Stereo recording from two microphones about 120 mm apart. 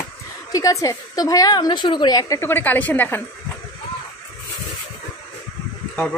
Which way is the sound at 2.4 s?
15° left (ahead or behind).